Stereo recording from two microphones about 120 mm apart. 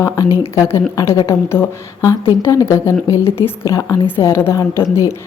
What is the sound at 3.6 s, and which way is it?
A woman's voice, 25° left (ahead or behind).